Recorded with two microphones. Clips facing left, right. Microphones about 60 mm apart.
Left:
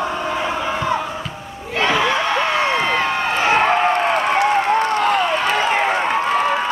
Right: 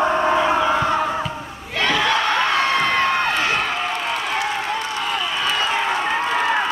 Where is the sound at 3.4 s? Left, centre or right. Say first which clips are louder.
Left 7 dB; left.